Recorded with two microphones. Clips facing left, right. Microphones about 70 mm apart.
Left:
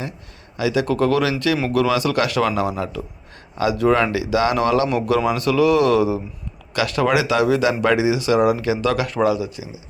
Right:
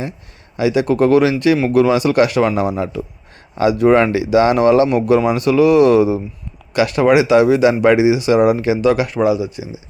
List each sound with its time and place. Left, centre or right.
0.5 s speech: right